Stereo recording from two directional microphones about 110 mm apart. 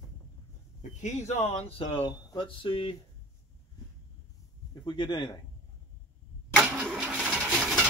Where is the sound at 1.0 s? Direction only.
90° left; by 3.0 s 55° left (ahead or behind).